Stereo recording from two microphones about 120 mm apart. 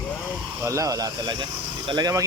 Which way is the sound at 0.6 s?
25° right (ahead or behind).